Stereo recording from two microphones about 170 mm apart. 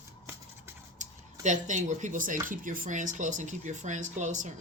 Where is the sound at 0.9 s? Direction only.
45° right (ahead or behind).